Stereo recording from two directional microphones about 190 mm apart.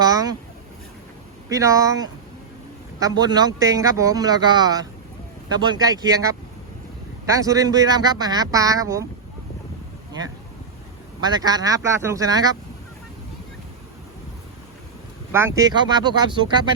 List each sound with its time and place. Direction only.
0.0 s a sound: 20° right (ahead or behind)
1.5 s speech: 15° right (ahead or behind)
7.3 s speech: 20° right (ahead or behind)
11.2 s speech: 20° right (ahead or behind)
15.3 s speech: 15° right (ahead or behind)